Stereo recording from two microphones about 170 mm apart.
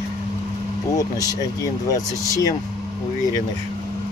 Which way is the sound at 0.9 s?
20° left (ahead or behind).